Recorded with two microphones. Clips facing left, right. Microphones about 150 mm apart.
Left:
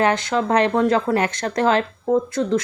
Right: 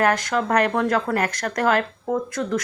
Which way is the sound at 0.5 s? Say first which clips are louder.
Left 3 dB; 20° left (ahead or behind).